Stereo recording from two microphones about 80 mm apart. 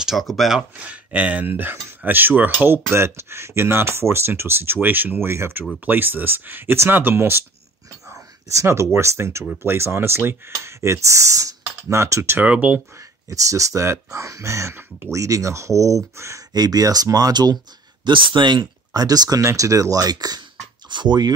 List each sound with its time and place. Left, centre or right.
0.0 s speech: centre; by 12.4 s right
12.4 s speech: centre
13.3 s speech: right
16.5 s speech: right
18.0 s speech: right
18.9 s speech: right
20.9 s speech: right